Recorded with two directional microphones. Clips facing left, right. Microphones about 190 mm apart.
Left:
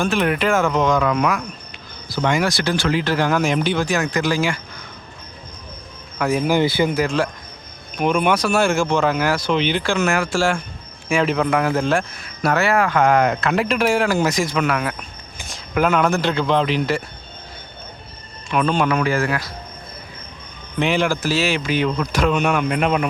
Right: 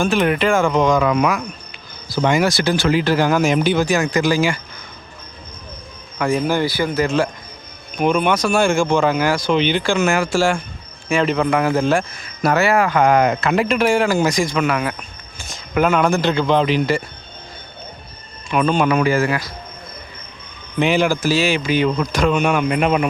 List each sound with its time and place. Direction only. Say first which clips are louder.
0.0 s speech: right 2 dB; centre (ahead or behind)
6.1 s speech: even; 5° left (ahead or behind)
6.6 s speech: left 2 dB; 20° left (ahead or behind)
7.9 s speech: right 1 dB; 5° left (ahead or behind)
18.5 s speech: right 2 dB; 5° right (ahead or behind)
20.7 s speech: right 3 dB; 5° right (ahead or behind)